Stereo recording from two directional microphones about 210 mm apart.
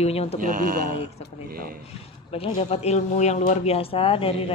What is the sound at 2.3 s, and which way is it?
Speech, 25° left (ahead or behind).